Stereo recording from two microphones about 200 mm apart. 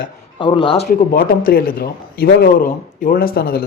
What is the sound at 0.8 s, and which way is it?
A man's voice, 50° left (ahead or behind).